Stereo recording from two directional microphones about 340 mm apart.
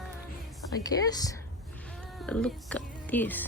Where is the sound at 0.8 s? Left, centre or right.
Centre.